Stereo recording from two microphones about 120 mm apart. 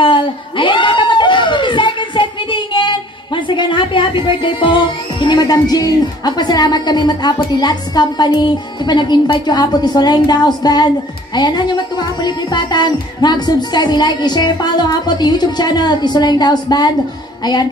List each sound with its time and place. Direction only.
0.0 s a sound: 45° left (ahead or behind)
3.4 s speech: 40° left (ahead or behind)
7.5 s music: 35° left (ahead or behind)